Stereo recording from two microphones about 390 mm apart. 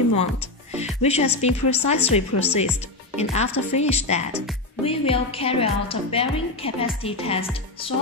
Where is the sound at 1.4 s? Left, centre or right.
Centre.